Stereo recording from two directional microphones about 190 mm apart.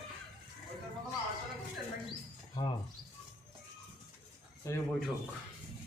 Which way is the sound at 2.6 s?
25° left (ahead or behind).